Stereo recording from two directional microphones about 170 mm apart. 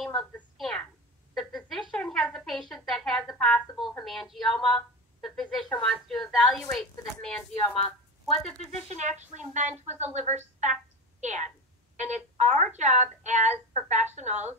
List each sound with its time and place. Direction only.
0.2 s a woman's voice: 5° left (ahead or behind)
1.3 s a sound: centre (ahead or behind)
4.0 s a woman's voice: centre (ahead or behind)
8.8 s a woman's voice: 45° right (ahead or behind)